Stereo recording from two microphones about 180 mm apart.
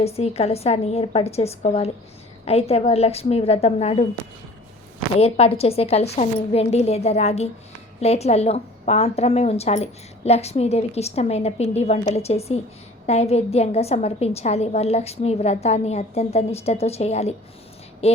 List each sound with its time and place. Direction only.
0.0 s a woman's voice: 35° left (ahead or behind)
5.1 s a woman's voice: 35° left (ahead or behind)